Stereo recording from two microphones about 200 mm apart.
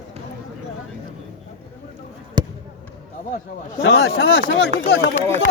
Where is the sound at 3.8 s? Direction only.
60° left (ahead or behind).